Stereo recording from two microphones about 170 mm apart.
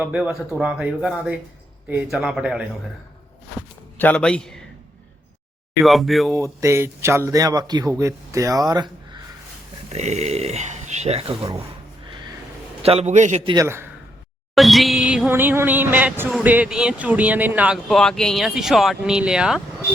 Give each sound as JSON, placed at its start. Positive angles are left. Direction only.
{"t": 0.0, "sound": "speech", "side_deg": -5}
{"t": 3.9, "sound": "a man's voice", "side_deg": 10}
{"t": 5.8, "sound": "speech", "side_deg": 0}
{"t": 6.3, "sound": "speech", "side_deg": -15}
{"t": 9.9, "sound": "speech", "side_deg": -40}
{"t": 12.8, "sound": "a man's voice", "side_deg": -35}
{"t": 13.4, "sound": "a man's voice", "side_deg": -25}
{"t": 14.5, "sound": "speech", "side_deg": 0}